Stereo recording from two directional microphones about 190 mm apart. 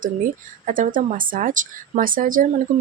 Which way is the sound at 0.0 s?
45° right (ahead or behind).